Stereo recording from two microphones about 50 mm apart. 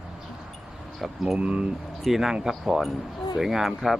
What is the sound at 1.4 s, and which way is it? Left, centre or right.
Speech, right.